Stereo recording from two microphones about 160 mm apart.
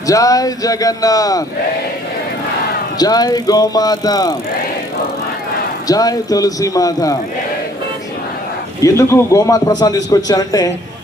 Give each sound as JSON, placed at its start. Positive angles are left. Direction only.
{"t": 0.1, "sound": "a man's voice", "side_deg": 20}
{"t": 3.0, "sound": "a man's voice", "side_deg": 25}
{"t": 5.9, "sound": "a man's voice", "side_deg": 25}
{"t": 8.8, "sound": "a man's voice", "side_deg": 15}